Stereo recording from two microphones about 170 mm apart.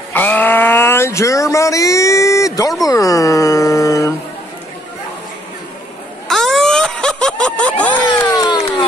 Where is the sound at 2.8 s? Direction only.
20° left (ahead or behind).